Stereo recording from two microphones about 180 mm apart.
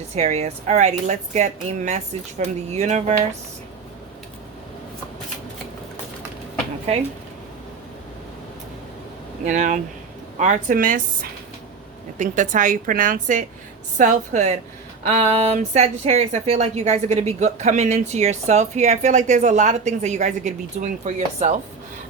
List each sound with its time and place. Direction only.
0.2 s speech: 40° right (ahead or behind)
9.4 s a woman's voice: 45° right (ahead or behind)